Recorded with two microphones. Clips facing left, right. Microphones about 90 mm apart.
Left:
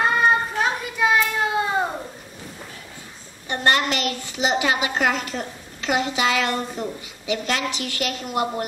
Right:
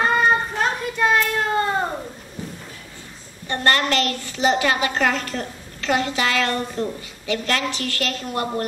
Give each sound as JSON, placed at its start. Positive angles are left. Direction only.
{"t": 0.0, "sound": "child singing", "side_deg": 0}
{"t": 3.4, "sound": "a woman's voice", "side_deg": 15}